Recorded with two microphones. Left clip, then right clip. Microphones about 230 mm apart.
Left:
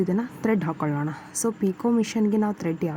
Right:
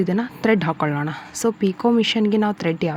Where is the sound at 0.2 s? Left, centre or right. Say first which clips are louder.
Right 6 dB; centre.